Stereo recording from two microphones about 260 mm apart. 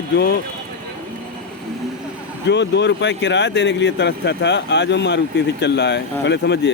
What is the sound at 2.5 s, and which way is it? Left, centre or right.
Speech, left.